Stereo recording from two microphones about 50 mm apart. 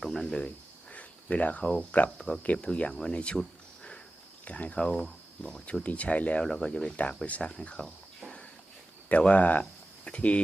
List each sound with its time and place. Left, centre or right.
0.0 s cricket: centre; by 1.7 s left
1.8 s speech: left
2.0 s speech: centre
2.4 s speech: left
4.4 s speech: left
6.4 s speech: centre
6.9 s speech: left
9.3 s speech: left